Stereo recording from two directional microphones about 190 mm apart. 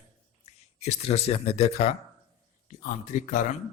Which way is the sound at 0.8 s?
35° left (ahead or behind).